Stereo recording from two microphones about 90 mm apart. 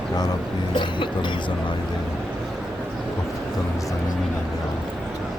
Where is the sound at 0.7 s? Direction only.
65° left (ahead or behind).